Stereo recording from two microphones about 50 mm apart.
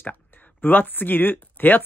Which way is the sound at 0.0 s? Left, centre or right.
Left.